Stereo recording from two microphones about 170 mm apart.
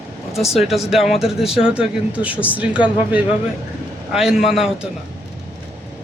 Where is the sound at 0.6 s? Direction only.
Centre (ahead or behind).